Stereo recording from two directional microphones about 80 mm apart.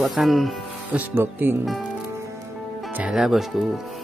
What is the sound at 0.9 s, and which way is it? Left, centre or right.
Speech, right.